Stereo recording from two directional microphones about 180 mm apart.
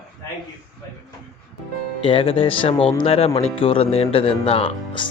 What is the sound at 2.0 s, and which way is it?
Speech, 30° left (ahead or behind).